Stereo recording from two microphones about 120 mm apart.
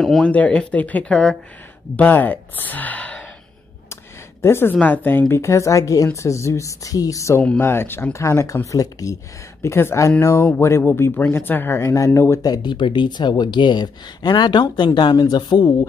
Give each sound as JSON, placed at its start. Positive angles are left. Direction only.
{"t": 0.0, "sound": "speech", "side_deg": 0}
{"t": 3.9, "sound": "a sound", "side_deg": 20}
{"t": 4.7, "sound": "speech", "side_deg": 15}